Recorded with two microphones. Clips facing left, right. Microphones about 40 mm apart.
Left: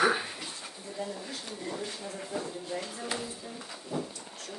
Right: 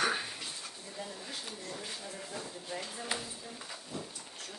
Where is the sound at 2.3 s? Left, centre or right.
Centre.